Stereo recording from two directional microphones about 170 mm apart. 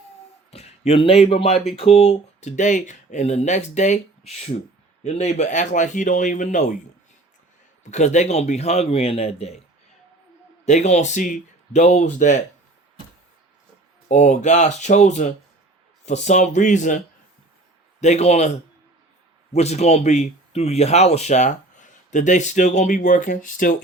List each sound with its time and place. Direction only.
0.5 s a man's voice: 40° left (ahead or behind)
7.9 s speech: 45° left (ahead or behind)
10.7 s speech: 45° left (ahead or behind)
14.1 s speech: 40° left (ahead or behind)
18.0 s speech: 40° left (ahead or behind)
19.5 s speech: 40° left (ahead or behind)